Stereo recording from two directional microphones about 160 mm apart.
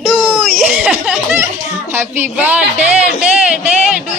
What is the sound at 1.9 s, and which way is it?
Speech, 15° right (ahead or behind).